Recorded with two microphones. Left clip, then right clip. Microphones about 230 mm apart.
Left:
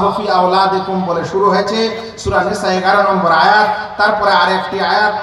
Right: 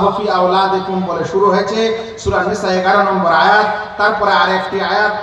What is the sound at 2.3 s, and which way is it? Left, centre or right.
A man's voice, left.